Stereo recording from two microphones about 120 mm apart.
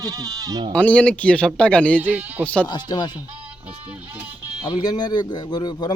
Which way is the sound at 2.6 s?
35° left (ahead or behind).